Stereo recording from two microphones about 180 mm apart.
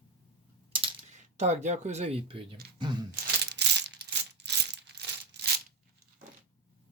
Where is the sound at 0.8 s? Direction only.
40° right (ahead or behind).